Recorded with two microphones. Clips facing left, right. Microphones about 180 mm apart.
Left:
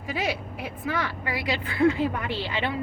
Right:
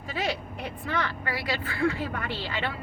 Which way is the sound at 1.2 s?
15° left (ahead or behind).